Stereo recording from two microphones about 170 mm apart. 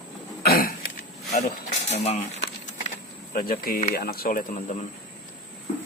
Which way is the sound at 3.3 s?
60° left (ahead or behind).